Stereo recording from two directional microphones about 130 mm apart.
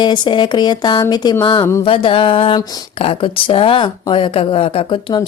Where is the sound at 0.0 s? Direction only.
35° left (ahead or behind).